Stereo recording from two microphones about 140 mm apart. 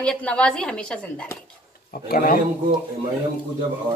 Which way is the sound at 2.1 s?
90° left.